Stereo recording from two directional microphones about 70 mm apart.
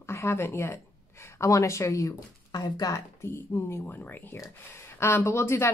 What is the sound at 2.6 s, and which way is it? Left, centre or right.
Speech, left.